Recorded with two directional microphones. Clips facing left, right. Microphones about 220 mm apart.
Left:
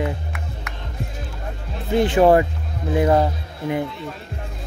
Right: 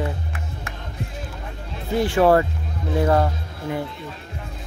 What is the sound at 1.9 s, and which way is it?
Speech, 20° left (ahead or behind).